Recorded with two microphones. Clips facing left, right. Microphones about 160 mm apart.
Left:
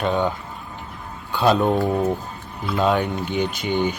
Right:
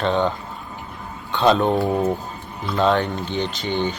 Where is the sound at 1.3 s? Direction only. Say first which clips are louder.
Right 1 dB; 5° left (ahead or behind).